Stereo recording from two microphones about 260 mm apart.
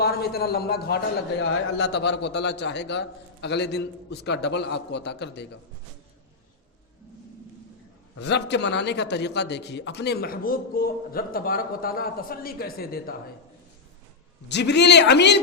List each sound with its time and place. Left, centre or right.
0.0 s a man's voice: left
8.2 s a man's voice: left
14.4 s a man's voice: left